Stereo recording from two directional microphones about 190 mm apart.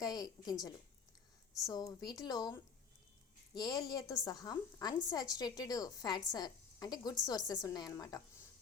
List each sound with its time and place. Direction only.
0.0 s a woman's voice: 20° left (ahead or behind)